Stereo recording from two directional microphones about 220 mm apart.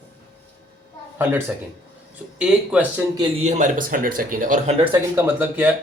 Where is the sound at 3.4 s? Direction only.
30° right (ahead or behind).